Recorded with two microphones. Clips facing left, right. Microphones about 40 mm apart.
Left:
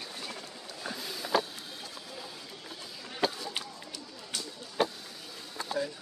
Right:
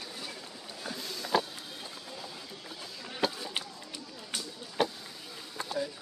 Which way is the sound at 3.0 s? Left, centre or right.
Centre.